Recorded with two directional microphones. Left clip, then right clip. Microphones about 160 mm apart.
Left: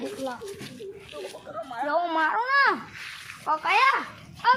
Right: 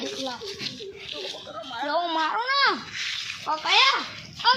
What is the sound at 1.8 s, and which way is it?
A child's voice, 5° right (ahead or behind).